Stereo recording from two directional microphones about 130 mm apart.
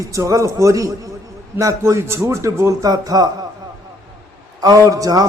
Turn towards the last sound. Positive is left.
turn(degrees=-25)  # may be behind; listen again after turning